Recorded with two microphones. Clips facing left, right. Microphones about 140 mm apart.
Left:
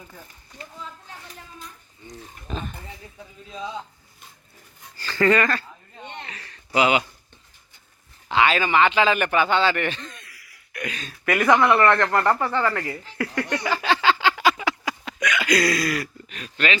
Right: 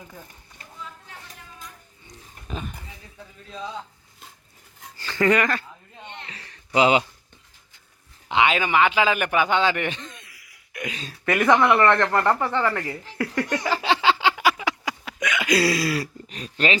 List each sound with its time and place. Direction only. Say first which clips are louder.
2.5 s speech: left 1 dB; 10° right (ahead or behind)
3.2 s a man's voice: even; 10° left (ahead or behind)
4.9 s a sound: left 1 dB; 20° right (ahead or behind)
6.7 s speech: right 2 dB; 30° right (ahead or behind)
8.3 s a man's voice: left 1 dB; 20° right (ahead or behind)
14.4 s a sound: left 1 dB; 10° right (ahead or behind); by 16.7 s 35° right (ahead or behind)